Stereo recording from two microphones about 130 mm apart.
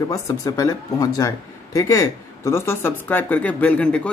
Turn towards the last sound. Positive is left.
turn(degrees=10)  # may be behind; listen again after turning